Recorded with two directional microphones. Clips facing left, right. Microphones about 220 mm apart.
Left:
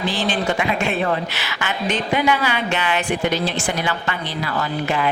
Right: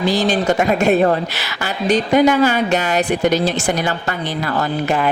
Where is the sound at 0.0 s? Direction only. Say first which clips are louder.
Right 5 dB; 40° right (ahead or behind).